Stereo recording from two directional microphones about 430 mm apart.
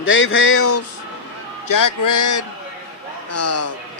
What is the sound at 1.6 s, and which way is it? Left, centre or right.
A man's voice, left.